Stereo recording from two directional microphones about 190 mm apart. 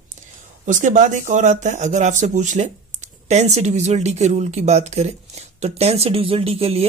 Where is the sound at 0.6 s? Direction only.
40° right (ahead or behind).